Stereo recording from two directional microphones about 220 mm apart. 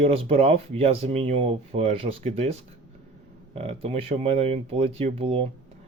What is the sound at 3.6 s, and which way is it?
Speech, 25° right (ahead or behind).